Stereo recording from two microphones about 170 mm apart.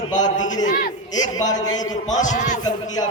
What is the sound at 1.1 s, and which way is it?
A man's voice, 20° left (ahead or behind).